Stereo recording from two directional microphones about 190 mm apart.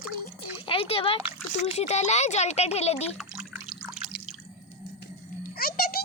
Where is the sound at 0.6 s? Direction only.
30° left (ahead or behind).